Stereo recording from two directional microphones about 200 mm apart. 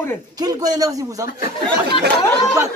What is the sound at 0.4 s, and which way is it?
Speech, 20° right (ahead or behind).